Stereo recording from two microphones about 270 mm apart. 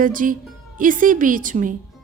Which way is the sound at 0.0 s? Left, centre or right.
Right.